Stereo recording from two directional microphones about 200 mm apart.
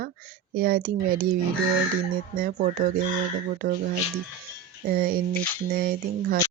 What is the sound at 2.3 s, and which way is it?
Speech, 45° right (ahead or behind).